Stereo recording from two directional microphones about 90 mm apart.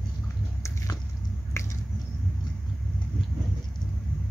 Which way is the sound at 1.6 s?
30° left (ahead or behind).